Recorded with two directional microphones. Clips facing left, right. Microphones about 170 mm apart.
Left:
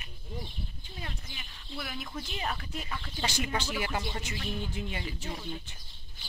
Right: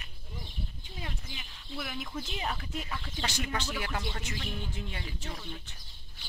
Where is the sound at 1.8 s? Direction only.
5° right (ahead or behind).